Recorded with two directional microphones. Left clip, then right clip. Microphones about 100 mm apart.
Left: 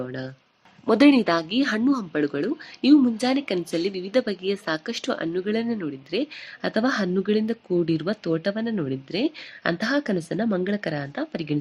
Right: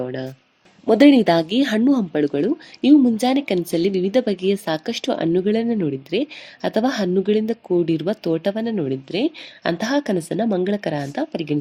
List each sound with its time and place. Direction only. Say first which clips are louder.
0.0 s speech: right 6 dB; 25° right (ahead or behind)